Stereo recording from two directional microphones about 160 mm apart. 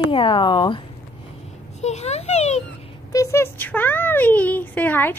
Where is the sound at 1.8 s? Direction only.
45° left (ahead or behind).